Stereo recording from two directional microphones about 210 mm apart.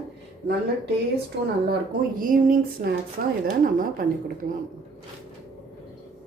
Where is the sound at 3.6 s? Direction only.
40° right (ahead or behind).